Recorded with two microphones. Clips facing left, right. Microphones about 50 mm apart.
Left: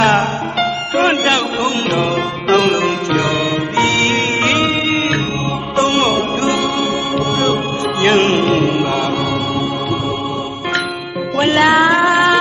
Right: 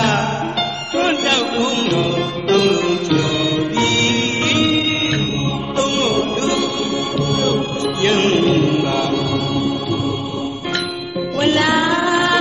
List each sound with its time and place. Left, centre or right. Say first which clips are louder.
0.0 s music: left 4 dB; left
5.8 s music: left 4 dB; left
11.3 s music: left 4 dB; left